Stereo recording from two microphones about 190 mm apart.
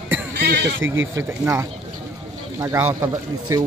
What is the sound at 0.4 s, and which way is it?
Speech, 65° right (ahead or behind).